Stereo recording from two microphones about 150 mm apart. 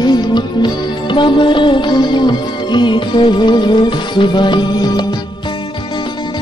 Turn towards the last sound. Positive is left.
turn(degrees=30)  # may be behind; listen again after turning